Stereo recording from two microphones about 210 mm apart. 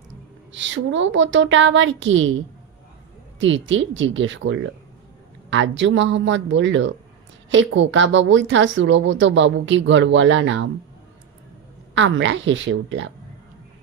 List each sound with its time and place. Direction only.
0.5 s a woman's voice: 60° right (ahead or behind)
3.3 s a woman's voice: 65° right (ahead or behind)
11.9 s a woman's voice: 60° right (ahead or behind)